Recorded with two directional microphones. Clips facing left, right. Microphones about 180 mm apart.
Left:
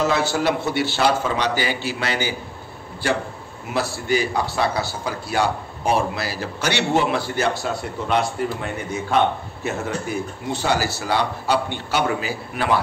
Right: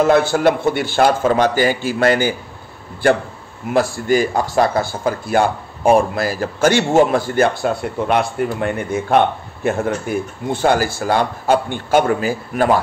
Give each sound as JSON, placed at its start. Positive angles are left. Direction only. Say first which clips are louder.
{"t": 0.0, "sound": "speech", "louder": "right 7 dB", "side_deg": -55}
{"t": 3.7, "sound": "speech", "louder": "right 6 dB", "side_deg": -50}